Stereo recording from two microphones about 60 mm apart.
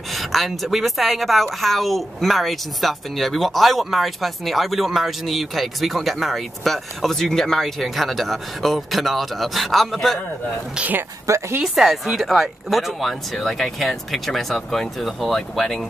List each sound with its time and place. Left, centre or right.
0.1 s a woman's voice: centre
10.8 s speech: right
11.2 s a woman's voice: right
11.6 s a woman's voice: centre